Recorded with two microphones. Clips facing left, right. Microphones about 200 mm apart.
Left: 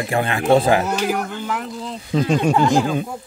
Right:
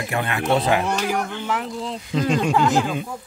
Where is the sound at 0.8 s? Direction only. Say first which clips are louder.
Left 2 dB; 5° left (ahead or behind).